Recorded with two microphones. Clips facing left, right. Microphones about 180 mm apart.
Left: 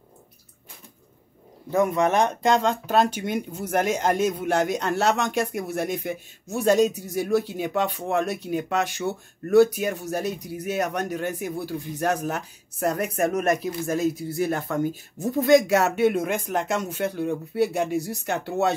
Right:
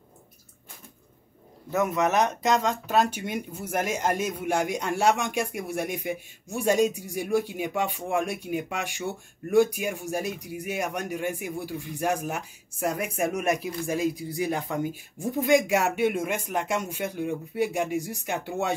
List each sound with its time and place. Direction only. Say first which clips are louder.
1.9 s speech: left 3 dB; 5° right (ahead or behind)
2.1 s speech: left 3 dB; 30° left (ahead or behind)
2.5 s a man's voice: left 2 dB; 5° right (ahead or behind)
17.9 s speech: left 3 dB; 35° left (ahead or behind)
18.2 s a man's voice: left 4 dB; 15° right (ahead or behind)